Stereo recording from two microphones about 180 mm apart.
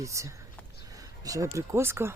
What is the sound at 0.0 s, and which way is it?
Speech, 15° right (ahead or behind).